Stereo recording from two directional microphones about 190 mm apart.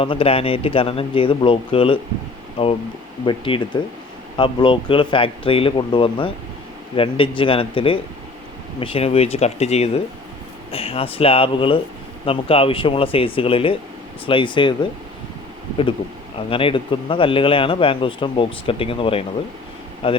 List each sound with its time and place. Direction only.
0.0 s speech: 30° left (ahead or behind)
16.5 s speech: 30° left (ahead or behind)